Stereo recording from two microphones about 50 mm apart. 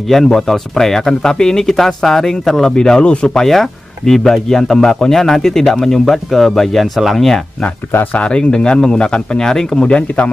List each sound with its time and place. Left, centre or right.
0.1 s speech: centre
3.4 s speech: centre
8.1 s speech: left